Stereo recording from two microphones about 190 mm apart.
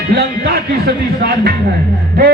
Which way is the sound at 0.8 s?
55° right (ahead or behind).